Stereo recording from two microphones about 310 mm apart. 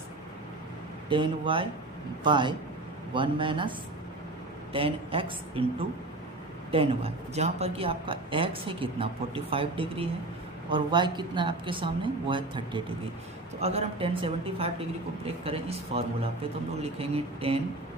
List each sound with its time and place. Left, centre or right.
1.1 s a woman's voice: centre
6.7 s a woman's voice: centre